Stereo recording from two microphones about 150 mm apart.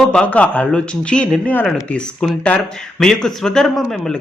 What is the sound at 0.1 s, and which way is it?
Speech, 10° left (ahead or behind).